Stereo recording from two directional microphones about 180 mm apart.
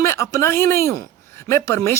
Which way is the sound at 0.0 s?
15° left (ahead or behind).